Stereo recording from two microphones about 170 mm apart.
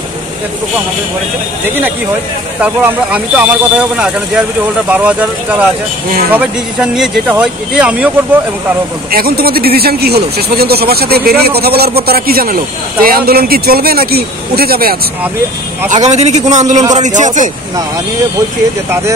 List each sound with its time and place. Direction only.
2.6 s speech: 10° right (ahead or behind)
6.3 s speech: 5° right (ahead or behind)
9.1 s speech: 60° right (ahead or behind)
15.9 s a man's voice: 40° right (ahead or behind)